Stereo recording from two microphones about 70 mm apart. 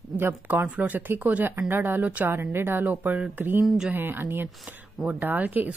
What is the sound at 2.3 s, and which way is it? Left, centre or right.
Speech, right.